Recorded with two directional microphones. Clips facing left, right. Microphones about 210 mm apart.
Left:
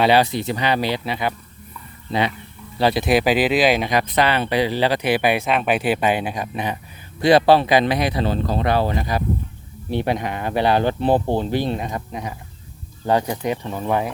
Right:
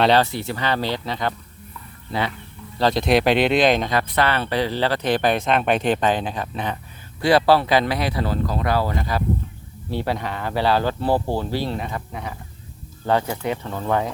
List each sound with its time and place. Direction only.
0.0 s speech: 10° left (ahead or behind)
2.7 s speech: 10° left (ahead or behind)